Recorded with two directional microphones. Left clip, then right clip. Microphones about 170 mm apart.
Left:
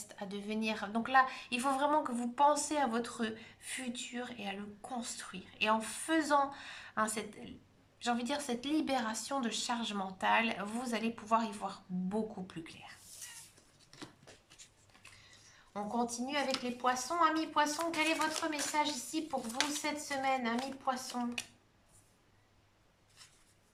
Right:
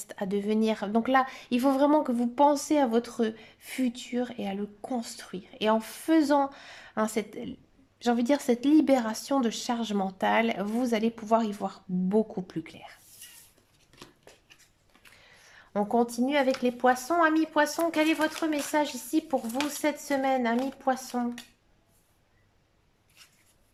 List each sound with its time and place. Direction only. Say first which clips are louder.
0.1 s a woman's voice: right 13 dB; 40° right (ahead or behind)
15.4 s speech: right 11 dB; 45° right (ahead or behind)